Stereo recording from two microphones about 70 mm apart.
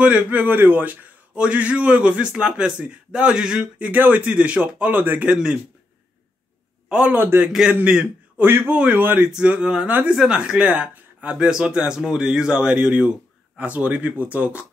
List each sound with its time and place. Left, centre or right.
0.0 s speech: right
3.9 s speech: right
6.9 s a man's voice: centre
7.2 s speech: right
7.5 s speech: centre
8.4 s speech: right
8.7 s speech: centre
9.3 s speech: centre
10.1 s speech: centre